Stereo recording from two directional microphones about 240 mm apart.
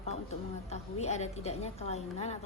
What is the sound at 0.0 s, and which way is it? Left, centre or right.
A woman's voice, left.